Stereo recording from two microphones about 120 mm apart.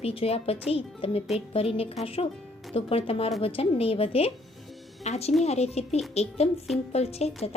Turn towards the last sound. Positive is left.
turn(degrees=60)  # may be behind; listen again after turning